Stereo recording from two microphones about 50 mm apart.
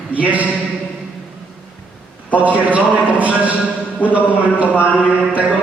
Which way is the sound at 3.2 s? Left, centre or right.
Right.